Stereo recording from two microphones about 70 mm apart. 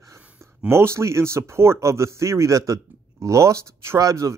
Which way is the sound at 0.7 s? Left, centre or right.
Right.